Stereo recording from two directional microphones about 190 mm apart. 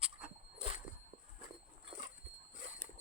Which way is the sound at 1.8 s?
25° right (ahead or behind).